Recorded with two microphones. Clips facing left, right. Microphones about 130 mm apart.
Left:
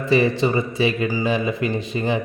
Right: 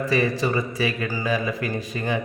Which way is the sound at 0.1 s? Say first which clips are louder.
Left 6 dB; 25° left (ahead or behind).